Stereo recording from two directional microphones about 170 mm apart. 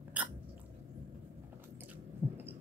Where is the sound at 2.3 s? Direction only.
10° right (ahead or behind).